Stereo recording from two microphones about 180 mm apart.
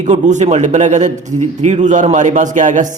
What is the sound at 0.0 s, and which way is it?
A man's voice, 40° right (ahead or behind).